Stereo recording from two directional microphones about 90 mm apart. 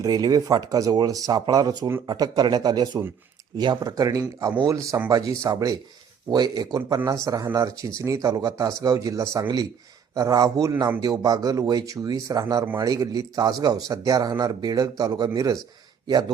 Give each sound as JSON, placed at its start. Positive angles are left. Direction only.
{"t": 0.0, "sound": "a man's voice", "side_deg": -45}